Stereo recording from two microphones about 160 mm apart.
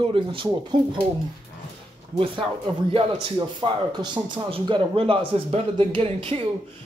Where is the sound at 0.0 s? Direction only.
35° right (ahead or behind).